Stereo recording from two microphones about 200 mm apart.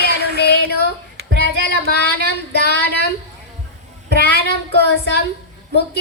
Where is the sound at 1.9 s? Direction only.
55° left (ahead or behind).